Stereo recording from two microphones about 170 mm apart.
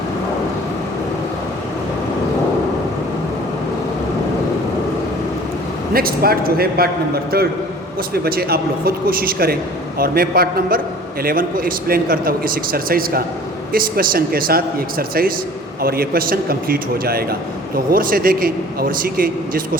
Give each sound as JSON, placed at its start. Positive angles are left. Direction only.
{"t": 5.9, "sound": "a man's voice", "side_deg": -60}